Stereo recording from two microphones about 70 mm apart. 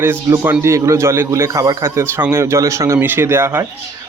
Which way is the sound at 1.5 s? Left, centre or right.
Right.